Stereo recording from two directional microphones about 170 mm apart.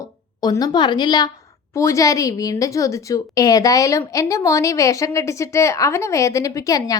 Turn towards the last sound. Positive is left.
turn(degrees=20)  # may be behind; listen again after turning